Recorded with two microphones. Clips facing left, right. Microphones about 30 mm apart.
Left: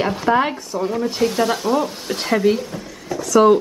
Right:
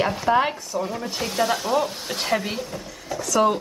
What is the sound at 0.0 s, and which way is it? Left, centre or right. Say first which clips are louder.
A woman's voice: left 2 dB; centre.